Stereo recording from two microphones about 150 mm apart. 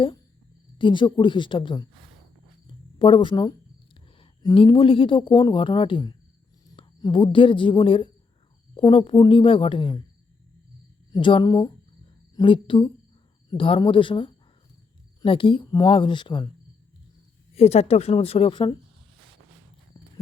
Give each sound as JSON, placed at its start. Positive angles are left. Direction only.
{"t": 0.8, "sound": "speech", "side_deg": 35}
{"t": 3.0, "sound": "speech", "side_deg": 35}
{"t": 11.1, "sound": "speech", "side_deg": 35}
{"t": 17.5, "sound": "speech", "side_deg": 45}